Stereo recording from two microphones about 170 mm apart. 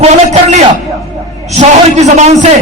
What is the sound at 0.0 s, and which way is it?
A man's voice, 45° right (ahead or behind).